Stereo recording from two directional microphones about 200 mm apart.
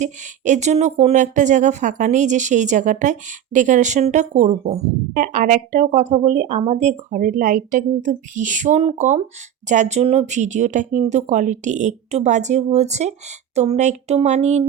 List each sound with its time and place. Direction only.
0.0 s speech: 35° right (ahead or behind)